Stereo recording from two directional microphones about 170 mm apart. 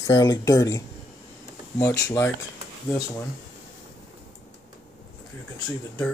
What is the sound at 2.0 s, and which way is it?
Speech, 10° left (ahead or behind).